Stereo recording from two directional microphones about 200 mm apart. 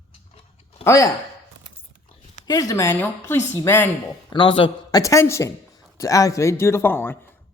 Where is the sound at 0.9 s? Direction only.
15° left (ahead or behind).